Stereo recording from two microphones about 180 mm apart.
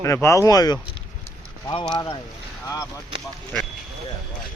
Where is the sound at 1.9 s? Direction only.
25° left (ahead or behind).